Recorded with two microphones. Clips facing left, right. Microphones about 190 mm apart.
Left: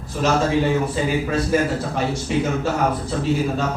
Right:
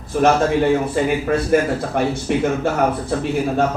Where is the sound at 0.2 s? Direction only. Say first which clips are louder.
Right 3 dB; 60° right (ahead or behind).